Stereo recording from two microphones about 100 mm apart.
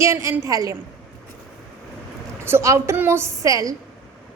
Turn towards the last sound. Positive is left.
turn(degrees=-35)  # may be behind; listen again after turning